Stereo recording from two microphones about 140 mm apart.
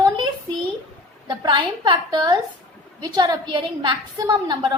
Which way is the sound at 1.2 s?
30° right (ahead or behind).